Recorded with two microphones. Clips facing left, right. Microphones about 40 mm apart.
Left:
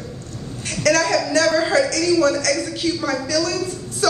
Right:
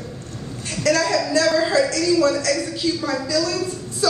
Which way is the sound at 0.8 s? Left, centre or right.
Left.